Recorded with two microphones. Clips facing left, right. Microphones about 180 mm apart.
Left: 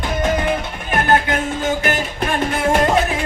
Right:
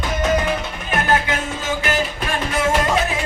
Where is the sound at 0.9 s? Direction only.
50° left (ahead or behind).